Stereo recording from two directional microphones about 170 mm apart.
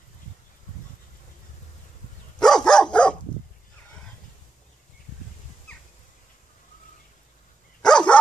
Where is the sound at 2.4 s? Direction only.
5° left (ahead or behind).